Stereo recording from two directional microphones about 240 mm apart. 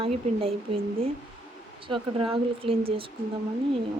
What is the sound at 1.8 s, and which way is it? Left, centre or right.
Speech, right.